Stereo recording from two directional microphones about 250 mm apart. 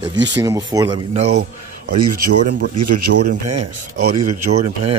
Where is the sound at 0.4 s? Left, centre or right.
Centre.